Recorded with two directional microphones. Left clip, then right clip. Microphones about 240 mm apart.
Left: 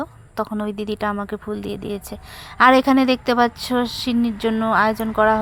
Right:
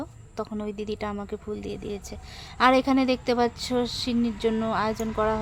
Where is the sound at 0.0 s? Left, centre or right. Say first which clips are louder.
Left 8 dB; centre.